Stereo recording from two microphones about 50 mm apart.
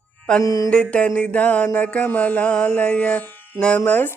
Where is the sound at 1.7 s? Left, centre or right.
Left.